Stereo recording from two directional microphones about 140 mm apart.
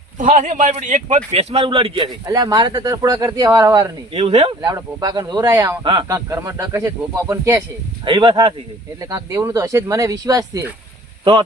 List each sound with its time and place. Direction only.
0.2 s a man's voice: 60° right (ahead or behind); by 2.0 s 40° right (ahead or behind)
2.2 s speech: 25° right (ahead or behind)
4.1 s speech: 45° right (ahead or behind)
4.6 s speech: 25° right (ahead or behind)
5.8 s speech: 35° right (ahead or behind); by 7.6 s 15° right (ahead or behind)
8.0 s speech: 35° right (ahead or behind)
9.0 s speech: 25° right (ahead or behind)
11.2 s speech: 40° right (ahead or behind)